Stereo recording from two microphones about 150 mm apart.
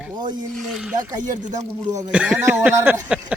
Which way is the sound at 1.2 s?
55° right (ahead or behind).